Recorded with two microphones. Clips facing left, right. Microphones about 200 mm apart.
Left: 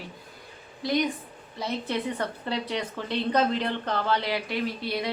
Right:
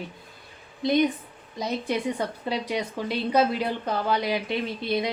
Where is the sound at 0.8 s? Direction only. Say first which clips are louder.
Right 4 dB; 20° right (ahead or behind).